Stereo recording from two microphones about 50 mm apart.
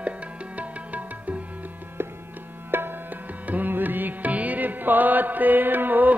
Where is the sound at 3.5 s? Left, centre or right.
Right.